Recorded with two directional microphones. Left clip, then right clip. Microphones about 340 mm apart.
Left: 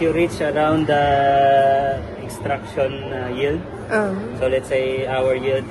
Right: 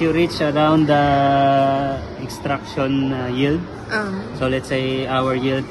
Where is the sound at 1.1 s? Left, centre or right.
Right.